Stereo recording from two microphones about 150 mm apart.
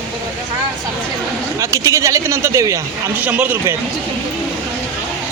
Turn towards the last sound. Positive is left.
turn(degrees=-10)  # may be behind; listen again after turning